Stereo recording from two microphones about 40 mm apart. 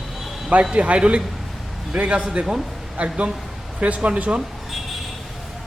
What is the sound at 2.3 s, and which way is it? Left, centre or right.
Speech, centre.